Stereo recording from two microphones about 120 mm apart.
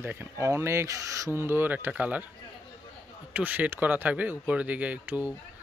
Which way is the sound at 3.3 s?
15° right (ahead or behind).